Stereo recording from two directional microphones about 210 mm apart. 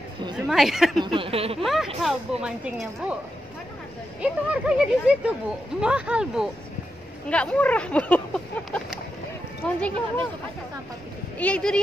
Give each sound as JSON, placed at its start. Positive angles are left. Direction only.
{"t": 0.5, "sound": "speech", "side_deg": 0}
{"t": 0.9, "sound": "a sound", "side_deg": -25}
{"t": 1.6, "sound": "speech", "side_deg": 0}
{"t": 4.2, "sound": "speech", "side_deg": -5}
{"t": 11.3, "sound": "speech", "side_deg": 5}